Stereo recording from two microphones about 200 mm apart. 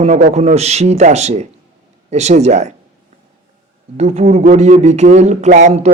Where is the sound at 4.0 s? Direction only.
35° right (ahead or behind).